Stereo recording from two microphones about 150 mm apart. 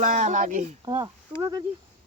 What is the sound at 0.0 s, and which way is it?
Speech, 55° right (ahead or behind).